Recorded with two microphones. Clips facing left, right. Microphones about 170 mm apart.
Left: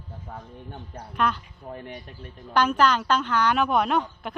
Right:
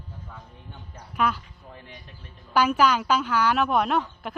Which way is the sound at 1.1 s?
5° right (ahead or behind).